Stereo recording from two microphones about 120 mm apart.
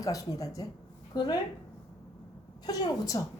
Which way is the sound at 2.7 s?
30° left (ahead or behind).